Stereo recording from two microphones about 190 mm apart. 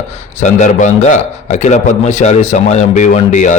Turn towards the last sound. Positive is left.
turn(degrees=40)  # may be behind; listen again after turning